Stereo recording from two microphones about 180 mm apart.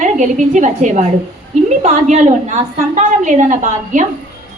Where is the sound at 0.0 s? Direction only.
45° right (ahead or behind).